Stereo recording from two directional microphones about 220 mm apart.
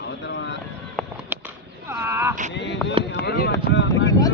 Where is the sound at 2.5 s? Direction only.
50° left (ahead or behind).